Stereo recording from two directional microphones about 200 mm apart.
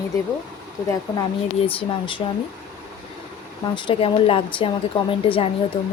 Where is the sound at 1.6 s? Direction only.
25° left (ahead or behind).